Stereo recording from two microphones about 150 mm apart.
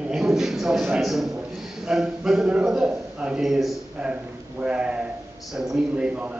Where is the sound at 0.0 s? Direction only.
5° right (ahead or behind).